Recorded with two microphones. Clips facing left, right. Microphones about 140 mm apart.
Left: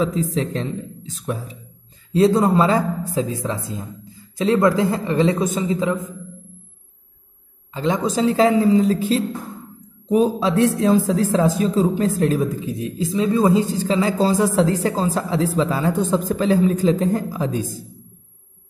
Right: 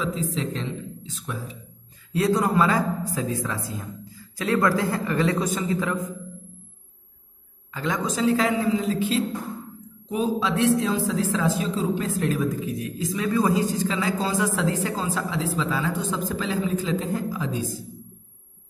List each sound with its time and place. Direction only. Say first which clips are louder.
0.0 s speech: left 6 dB; 45° left (ahead or behind)
2.1 s speech: left 6 dB; 25° left (ahead or behind)
7.7 s a woman's voice: left 6 dB; 25° left (ahead or behind); by 17.6 s 45° left (ahead or behind)